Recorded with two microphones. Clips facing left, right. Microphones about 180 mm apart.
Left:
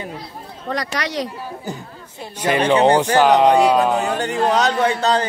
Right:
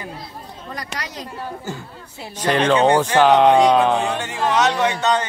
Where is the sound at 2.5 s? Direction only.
15° left (ahead or behind).